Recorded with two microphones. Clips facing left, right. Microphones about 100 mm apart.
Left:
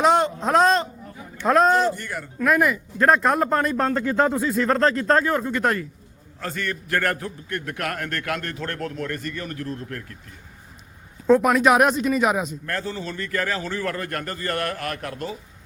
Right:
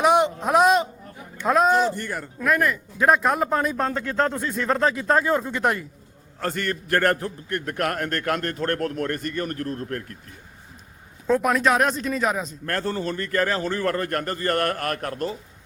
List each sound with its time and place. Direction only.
0.0 s a sound: 15° right (ahead or behind)
1.5 s a man's voice: 5° right (ahead or behind)
2.0 s a man's voice: 40° right (ahead or behind)
2.4 s a man's voice: 5° left (ahead or behind); by 5.8 s 15° right (ahead or behind)
7.0 s a man's voice: 35° right (ahead or behind)
11.3 s a man's voice: centre (ahead or behind)
12.7 s a man's voice: 55° right (ahead or behind)